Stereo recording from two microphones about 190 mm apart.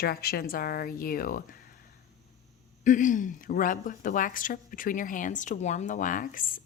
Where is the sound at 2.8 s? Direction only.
40° left (ahead or behind).